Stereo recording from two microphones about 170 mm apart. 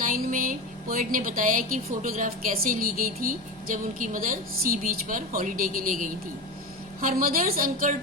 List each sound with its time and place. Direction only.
0.0 s a woman's voice: 55° right (ahead or behind)